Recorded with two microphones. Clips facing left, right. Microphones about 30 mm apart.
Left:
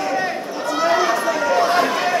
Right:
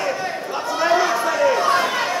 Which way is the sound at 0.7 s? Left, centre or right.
Centre.